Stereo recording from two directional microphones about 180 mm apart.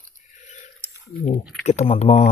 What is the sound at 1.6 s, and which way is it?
Speech, 40° left (ahead or behind).